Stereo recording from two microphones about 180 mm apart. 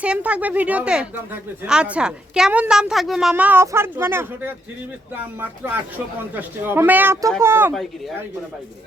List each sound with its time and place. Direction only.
0.0 s speech: 5° right (ahead or behind)